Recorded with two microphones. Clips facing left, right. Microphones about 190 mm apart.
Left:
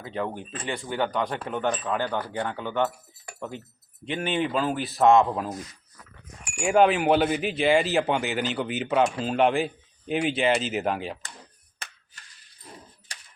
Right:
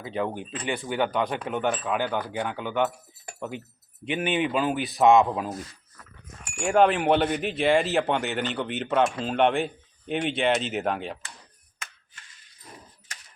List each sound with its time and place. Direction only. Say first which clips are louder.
0.0 s speech: right 2 dB; 15° right (ahead or behind)
4.0 s speech: right 1 dB; 15° right (ahead or behind)
5.0 s speech: even; centre (ahead or behind)
6.4 s wind chime: left 1 dB; 10° left (ahead or behind)
6.7 s speech: left 1 dB; centre (ahead or behind)